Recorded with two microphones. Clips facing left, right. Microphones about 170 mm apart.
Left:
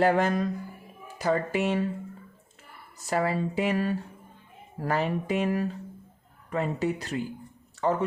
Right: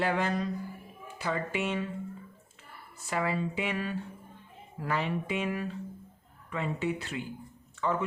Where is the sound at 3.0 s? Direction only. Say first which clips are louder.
Left 4 dB; 40° left (ahead or behind).